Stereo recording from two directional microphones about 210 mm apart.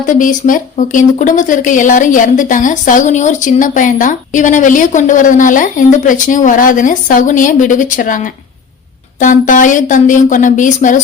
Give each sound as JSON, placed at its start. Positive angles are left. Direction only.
{"t": 0.0, "sound": "a woman's voice", "side_deg": 40}